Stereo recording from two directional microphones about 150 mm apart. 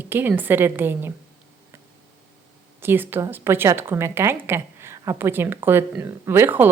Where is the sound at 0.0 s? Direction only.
15° right (ahead or behind).